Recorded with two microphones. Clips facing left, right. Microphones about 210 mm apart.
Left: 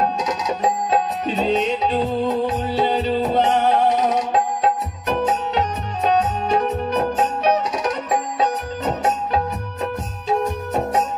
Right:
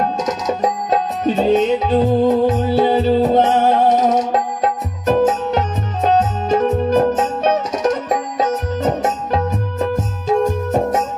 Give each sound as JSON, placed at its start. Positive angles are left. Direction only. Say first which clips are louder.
{"t": 0.2, "sound": "music", "louder": "right 3 dB", "side_deg": -45}